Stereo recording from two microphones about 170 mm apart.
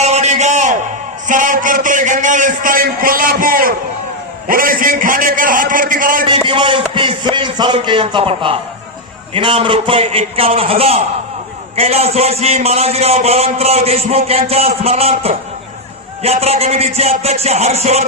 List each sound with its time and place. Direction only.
0.0 s a sound: 40° right (ahead or behind)
1.3 s a man's voice: 50° right (ahead or behind)
6.2 s a man's voice: 30° right (ahead or behind)